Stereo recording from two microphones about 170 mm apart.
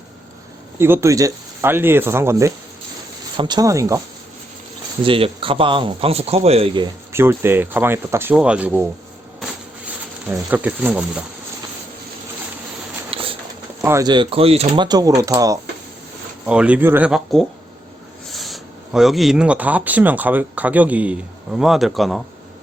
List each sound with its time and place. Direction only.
0.8 s speech: 15° right (ahead or behind)
5.0 s speech: 30° right (ahead or behind)
7.1 s speech: 15° right (ahead or behind)
9.4 s bee: 5° right (ahead or behind)
10.5 s speech: 10° right (ahead or behind)
13.1 s a sound: 30° right (ahead or behind)
13.8 s speech: 20° right (ahead or behind); by 14.8 s 35° right (ahead or behind)
14.8 s speech: 20° right (ahead or behind)
16.5 s speech: 5° right (ahead or behind)